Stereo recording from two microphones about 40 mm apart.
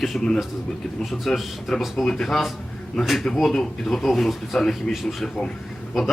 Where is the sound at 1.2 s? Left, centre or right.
Centre.